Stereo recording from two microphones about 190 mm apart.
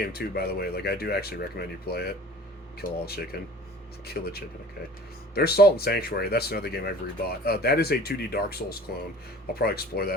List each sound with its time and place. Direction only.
0.1 s speech: 55° left (ahead or behind)